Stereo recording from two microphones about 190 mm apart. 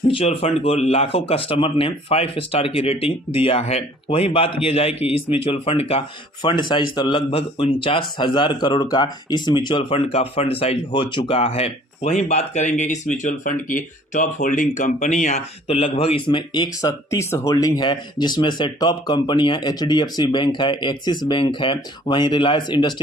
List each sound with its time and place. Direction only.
0.1 s a man's voice: 30° left (ahead or behind)